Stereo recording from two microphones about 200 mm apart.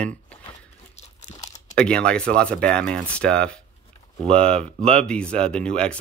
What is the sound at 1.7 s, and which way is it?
Speech, 5° left (ahead or behind).